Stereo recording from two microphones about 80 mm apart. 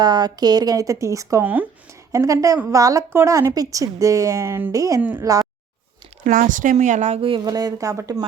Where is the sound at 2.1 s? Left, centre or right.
Right.